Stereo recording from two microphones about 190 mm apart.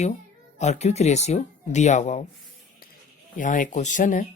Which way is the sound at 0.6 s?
35° left (ahead or behind).